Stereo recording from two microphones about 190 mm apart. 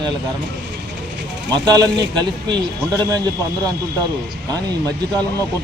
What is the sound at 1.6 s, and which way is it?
Speech, 20° right (ahead or behind).